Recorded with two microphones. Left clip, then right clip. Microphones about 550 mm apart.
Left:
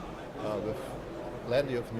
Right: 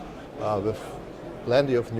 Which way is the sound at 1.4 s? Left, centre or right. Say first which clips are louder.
Right 8 dB; right.